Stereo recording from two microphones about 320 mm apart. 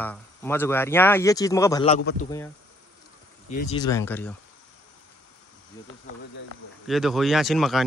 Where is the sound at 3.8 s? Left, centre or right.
Centre.